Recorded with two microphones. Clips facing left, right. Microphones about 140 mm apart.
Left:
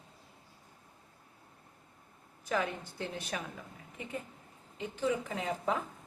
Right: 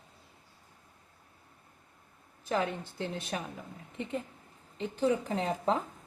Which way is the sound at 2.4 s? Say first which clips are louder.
Right 2 dB; 25° right (ahead or behind).